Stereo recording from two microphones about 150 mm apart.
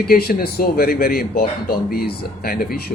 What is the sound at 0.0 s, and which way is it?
Speech, 90° left.